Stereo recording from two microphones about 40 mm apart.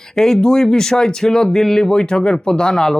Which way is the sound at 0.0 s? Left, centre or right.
Centre.